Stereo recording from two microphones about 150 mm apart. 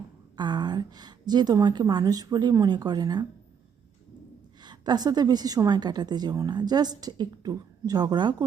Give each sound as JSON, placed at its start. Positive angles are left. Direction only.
{"t": 0.3, "sound": "a woman's voice", "side_deg": -30}
{"t": 4.6, "sound": "a woman's voice", "side_deg": -30}